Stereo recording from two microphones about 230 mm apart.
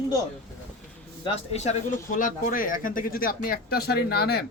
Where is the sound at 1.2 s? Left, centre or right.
Left.